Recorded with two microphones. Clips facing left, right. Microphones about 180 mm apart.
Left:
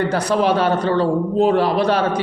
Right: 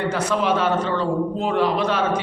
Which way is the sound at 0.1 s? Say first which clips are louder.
Left 4 dB; 35° left (ahead or behind).